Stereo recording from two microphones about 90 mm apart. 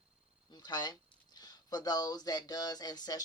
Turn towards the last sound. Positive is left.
turn(degrees=45)  # may be behind; listen again after turning